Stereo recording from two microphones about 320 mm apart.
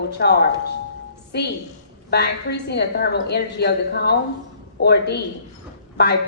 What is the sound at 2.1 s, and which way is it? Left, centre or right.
A woman's voice, left.